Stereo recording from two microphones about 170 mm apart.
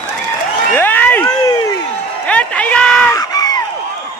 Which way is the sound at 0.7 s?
10° left (ahead or behind).